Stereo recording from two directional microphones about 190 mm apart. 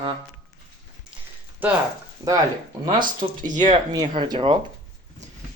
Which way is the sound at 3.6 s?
20° right (ahead or behind).